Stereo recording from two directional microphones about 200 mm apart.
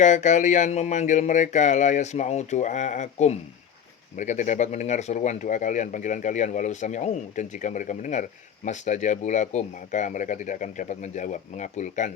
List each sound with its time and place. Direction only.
0.0 s speech: 35° left (ahead or behind)